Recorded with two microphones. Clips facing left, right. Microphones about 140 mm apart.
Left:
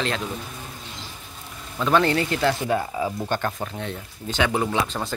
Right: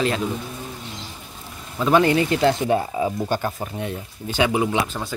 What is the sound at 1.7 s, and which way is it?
Speech, 10° right (ahead or behind).